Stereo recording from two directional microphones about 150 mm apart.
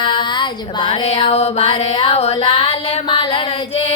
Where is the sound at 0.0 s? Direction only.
30° left (ahead or behind).